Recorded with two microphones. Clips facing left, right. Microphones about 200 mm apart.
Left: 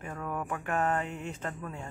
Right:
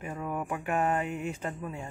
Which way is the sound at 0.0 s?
10° right (ahead or behind).